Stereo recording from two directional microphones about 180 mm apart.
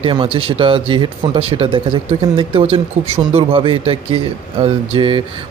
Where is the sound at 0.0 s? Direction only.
30° right (ahead or behind).